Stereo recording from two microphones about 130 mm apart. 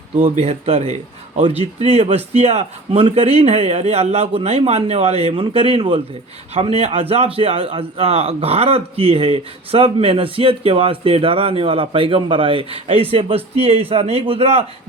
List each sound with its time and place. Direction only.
0.2 s a man's voice: 50° right (ahead or behind)